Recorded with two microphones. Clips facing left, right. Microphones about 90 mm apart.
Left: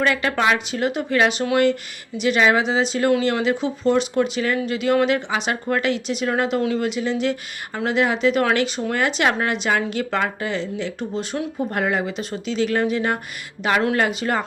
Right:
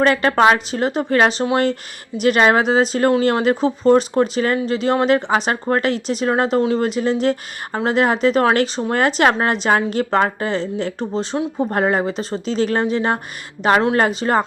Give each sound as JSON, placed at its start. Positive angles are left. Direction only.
{"t": 0.0, "sound": "speech", "side_deg": -40}
{"t": 2.1, "sound": "speech", "side_deg": -45}